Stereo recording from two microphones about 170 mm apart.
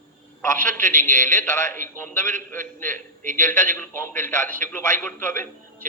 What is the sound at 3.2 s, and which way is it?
Speech, 45° right (ahead or behind).